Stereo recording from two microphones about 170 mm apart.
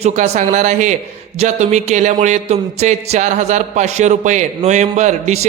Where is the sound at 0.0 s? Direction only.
40° right (ahead or behind).